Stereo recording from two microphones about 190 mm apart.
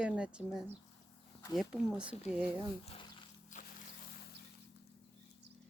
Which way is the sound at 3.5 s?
40° left (ahead or behind).